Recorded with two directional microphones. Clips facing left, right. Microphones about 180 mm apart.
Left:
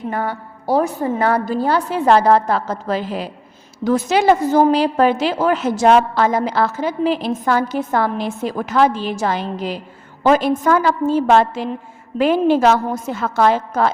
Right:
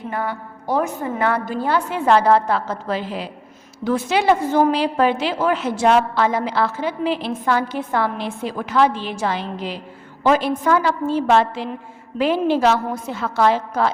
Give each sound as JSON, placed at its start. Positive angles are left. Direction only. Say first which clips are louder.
{"t": 0.1, "sound": "a woman's voice", "louder": "even", "side_deg": 45}